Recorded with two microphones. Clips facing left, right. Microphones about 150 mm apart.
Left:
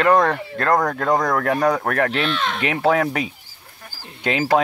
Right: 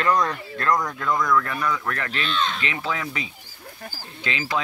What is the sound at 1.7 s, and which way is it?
Speech, 60° left (ahead or behind).